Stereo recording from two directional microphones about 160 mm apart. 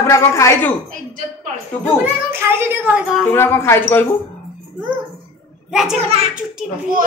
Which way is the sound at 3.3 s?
15° left (ahead or behind).